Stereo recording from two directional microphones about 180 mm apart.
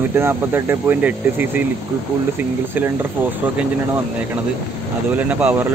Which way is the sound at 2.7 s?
10° right (ahead or behind).